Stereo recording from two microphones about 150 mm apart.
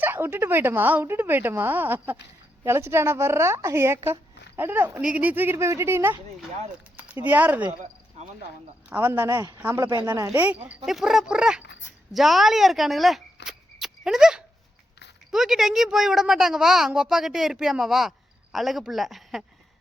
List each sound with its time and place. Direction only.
0.0 s speech: 15° right (ahead or behind)
7.3 s speech: 10° right (ahead or behind)
8.9 s speech: 10° right (ahead or behind)
9.9 s speech: 25° right (ahead or behind)
10.2 s a woman's voice: 10° right (ahead or behind)